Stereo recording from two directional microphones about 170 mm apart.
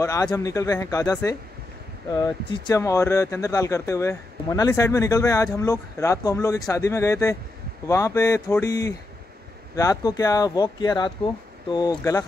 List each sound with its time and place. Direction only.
0.0 s speech: 20° left (ahead or behind)